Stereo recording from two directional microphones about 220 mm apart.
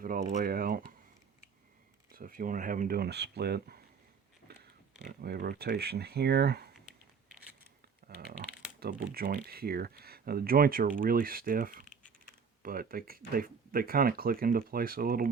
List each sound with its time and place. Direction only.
0.0 s speech: 40° right (ahead or behind)
2.1 s speech: 40° right (ahead or behind)
4.5 s a sound: 45° right (ahead or behind)
5.0 s speech: 45° right (ahead or behind)
8.8 s speech: 45° right (ahead or behind)